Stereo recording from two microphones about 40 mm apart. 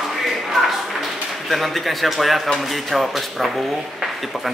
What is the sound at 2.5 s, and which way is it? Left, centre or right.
Speech, centre.